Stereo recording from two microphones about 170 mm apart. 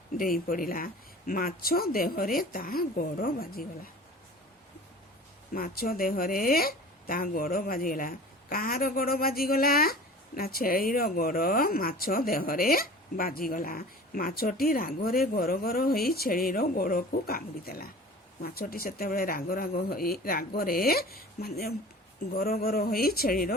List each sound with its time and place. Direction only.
0.2 s a woman's voice: 55° left (ahead or behind)
5.5 s a woman's voice: 60° left (ahead or behind)